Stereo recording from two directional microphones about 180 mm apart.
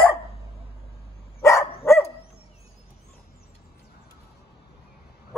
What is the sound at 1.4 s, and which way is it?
Dog, 15° left (ahead or behind).